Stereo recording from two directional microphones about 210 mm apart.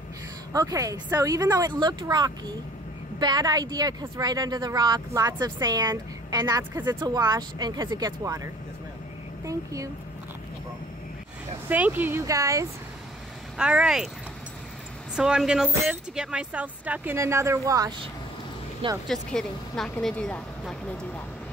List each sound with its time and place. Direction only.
0.5 s speech: 15° right (ahead or behind)
9.5 s speech: 15° right (ahead or behind)
11.7 s speech: 10° right (ahead or behind)
13.6 s speech: 5° right (ahead or behind)
15.1 s speech: 5° right (ahead or behind)
19.0 s speech: centre (ahead or behind)